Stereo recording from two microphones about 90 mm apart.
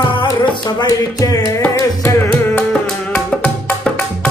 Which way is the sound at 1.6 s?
15° left (ahead or behind).